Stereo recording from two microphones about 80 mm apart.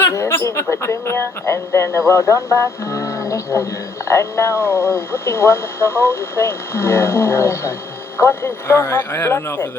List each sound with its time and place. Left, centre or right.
0.1 s speech: left